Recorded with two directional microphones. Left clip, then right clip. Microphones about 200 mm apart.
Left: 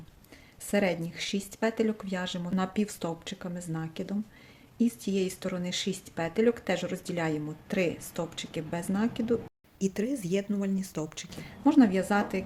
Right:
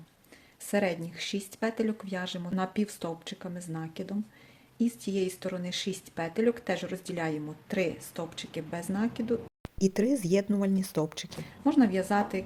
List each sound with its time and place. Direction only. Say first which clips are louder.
0.7 s speech: left 1 dB; centre (ahead or behind)
9.7 s speech: right 4 dB; 25° right (ahead or behind)
11.4 s speech: left 3 dB; centre (ahead or behind)